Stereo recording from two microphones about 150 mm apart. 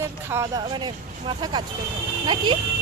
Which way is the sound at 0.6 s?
35° right (ahead or behind).